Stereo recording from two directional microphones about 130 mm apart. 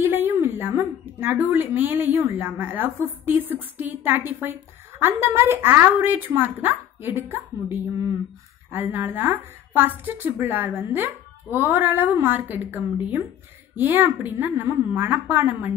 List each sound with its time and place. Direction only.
0.0 s a woman's voice: 15° right (ahead or behind)